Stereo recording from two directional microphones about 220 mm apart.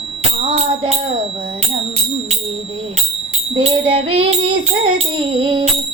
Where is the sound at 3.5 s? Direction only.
30° right (ahead or behind).